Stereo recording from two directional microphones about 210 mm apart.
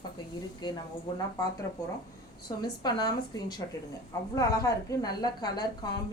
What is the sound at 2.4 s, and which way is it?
A woman's voice, 20° left (ahead or behind).